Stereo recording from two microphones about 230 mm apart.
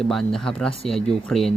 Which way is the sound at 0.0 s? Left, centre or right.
Centre.